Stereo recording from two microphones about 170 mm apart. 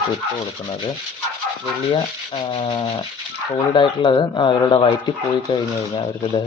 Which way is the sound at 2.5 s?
30° left (ahead or behind).